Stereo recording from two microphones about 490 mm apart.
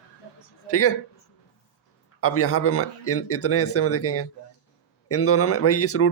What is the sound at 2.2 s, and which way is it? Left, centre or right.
Speech, left.